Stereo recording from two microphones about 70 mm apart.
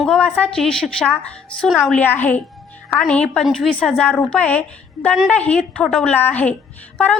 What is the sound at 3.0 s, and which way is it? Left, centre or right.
A woman's voice, centre.